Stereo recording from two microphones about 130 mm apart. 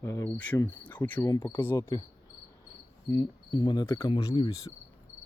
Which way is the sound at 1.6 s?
20° left (ahead or behind).